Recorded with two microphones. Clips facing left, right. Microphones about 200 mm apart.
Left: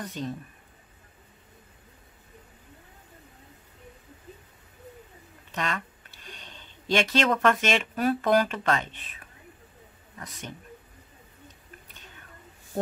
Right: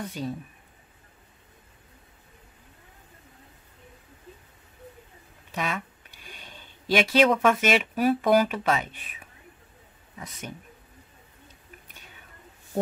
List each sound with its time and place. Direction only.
0.0 s speech: 10° right (ahead or behind)
5.5 s speech: 10° right (ahead or behind)